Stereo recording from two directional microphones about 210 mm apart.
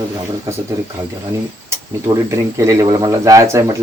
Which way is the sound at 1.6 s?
15° right (ahead or behind).